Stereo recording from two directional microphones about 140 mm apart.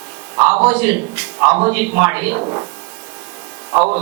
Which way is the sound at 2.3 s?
30° right (ahead or behind).